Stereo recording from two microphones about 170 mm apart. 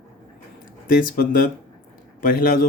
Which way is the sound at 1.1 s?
55° left (ahead or behind).